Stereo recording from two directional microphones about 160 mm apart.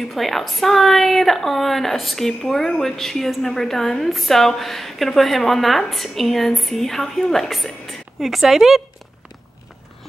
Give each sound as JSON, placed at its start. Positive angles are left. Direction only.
{"t": 0.1, "sound": "a woman's voice", "side_deg": 0}